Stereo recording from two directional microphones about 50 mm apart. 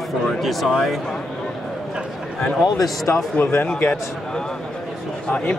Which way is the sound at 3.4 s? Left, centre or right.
Left.